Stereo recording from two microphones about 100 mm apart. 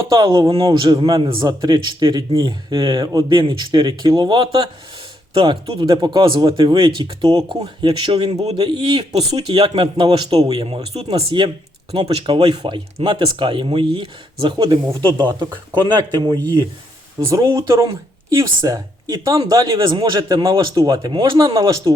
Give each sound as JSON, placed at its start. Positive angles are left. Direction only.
{"t": 0.1, "sound": "speech", "side_deg": -50}
{"t": 7.8, "sound": "speech", "side_deg": -70}
{"t": 8.5, "sound": "speech", "side_deg": -50}
{"t": 10.9, "sound": "speech", "side_deg": -80}
{"t": 11.3, "sound": "speech", "side_deg": -55}